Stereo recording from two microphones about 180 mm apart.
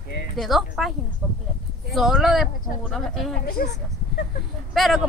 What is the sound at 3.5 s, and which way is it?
Speech, 40° left (ahead or behind).